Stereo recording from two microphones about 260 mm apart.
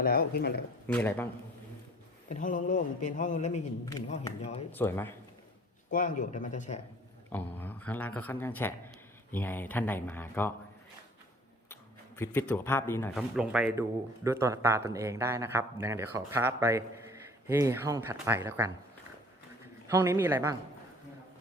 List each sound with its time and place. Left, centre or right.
0.0 s speech: left
0.9 s speech: centre
2.3 s a man's voice: left
3.8 s speech: centre
5.9 s a man's voice: left
7.3 s speech: centre
11.7 s speech: centre
19.9 s speech: centre